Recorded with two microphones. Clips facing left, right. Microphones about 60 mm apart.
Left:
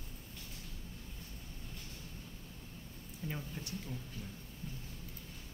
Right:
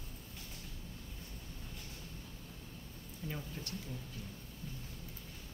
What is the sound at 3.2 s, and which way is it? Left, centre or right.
Speech, centre.